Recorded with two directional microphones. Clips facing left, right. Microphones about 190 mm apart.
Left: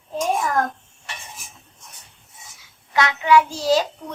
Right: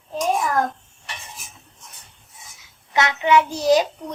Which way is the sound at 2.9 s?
20° right (ahead or behind).